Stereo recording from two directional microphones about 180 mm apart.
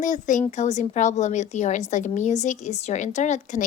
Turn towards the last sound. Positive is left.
turn(degrees=40)  # may be behind; listen again after turning